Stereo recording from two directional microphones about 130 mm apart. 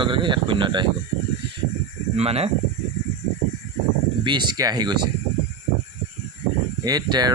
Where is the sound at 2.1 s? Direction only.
50° right (ahead or behind).